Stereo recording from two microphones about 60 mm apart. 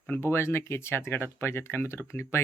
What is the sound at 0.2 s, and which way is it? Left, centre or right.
Speech, left.